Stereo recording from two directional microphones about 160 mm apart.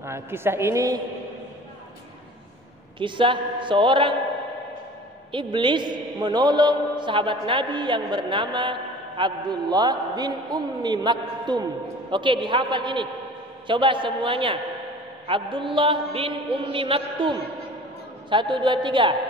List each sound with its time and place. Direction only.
0.0 s a woman's voice: 15° right (ahead or behind)
3.0 s a woman's voice: 30° right (ahead or behind)
5.3 s a man's voice: 30° right (ahead or behind)